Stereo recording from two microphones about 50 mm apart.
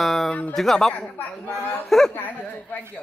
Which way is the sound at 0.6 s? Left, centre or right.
Centre.